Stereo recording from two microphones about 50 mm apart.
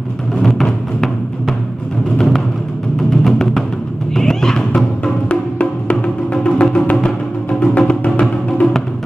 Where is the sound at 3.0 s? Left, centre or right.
Centre; by 8.6 s left.